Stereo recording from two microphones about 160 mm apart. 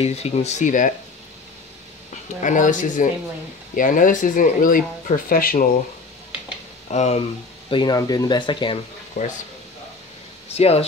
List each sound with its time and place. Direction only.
0.0 s speech: 40° left (ahead or behind)
2.4 s speech: 55° left (ahead or behind)
6.9 s speech: 45° left (ahead or behind)
7.7 s speech: 25° left (ahead or behind)
9.2 s speech: 50° left (ahead or behind)
10.5 s speech: 40° left (ahead or behind)